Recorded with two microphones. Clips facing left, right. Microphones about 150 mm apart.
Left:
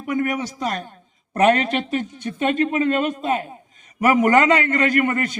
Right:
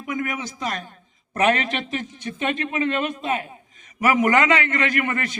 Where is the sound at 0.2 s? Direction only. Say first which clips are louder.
Left 5 dB; 35° left (ahead or behind).